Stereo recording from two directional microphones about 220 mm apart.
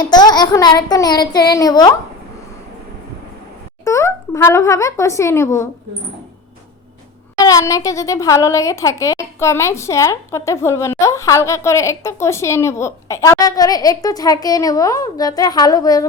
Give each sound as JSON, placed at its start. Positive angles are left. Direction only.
{"t": 0.0, "sound": "speech", "side_deg": 20}
{"t": 3.8, "sound": "speech", "side_deg": 15}
{"t": 7.3, "sound": "speech", "side_deg": 15}